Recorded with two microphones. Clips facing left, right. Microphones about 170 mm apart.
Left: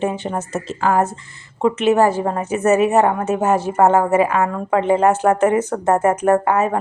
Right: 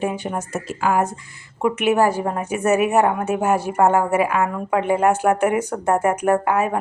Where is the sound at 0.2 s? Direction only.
15° right (ahead or behind).